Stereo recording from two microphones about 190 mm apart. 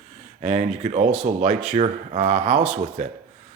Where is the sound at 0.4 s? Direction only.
35° right (ahead or behind).